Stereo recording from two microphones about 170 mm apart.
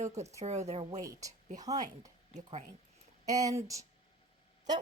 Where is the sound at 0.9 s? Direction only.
20° right (ahead or behind).